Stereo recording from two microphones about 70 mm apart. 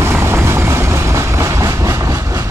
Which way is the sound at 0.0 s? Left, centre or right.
Right.